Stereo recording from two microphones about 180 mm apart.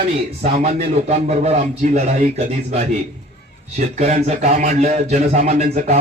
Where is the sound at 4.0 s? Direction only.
35° right (ahead or behind).